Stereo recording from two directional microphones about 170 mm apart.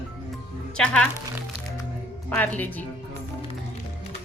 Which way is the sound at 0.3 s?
5° left (ahead or behind).